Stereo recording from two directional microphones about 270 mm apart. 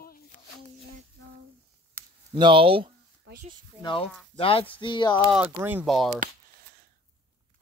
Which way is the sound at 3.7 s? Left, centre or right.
Centre.